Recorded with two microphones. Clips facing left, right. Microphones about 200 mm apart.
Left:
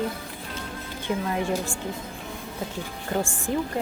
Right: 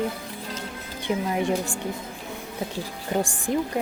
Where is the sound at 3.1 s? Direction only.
15° right (ahead or behind).